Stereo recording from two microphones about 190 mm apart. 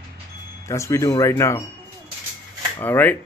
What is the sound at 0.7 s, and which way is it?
Speech, 15° left (ahead or behind).